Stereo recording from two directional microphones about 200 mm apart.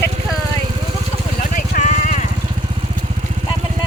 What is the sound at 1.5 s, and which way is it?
Vehicle, 40° left (ahead or behind).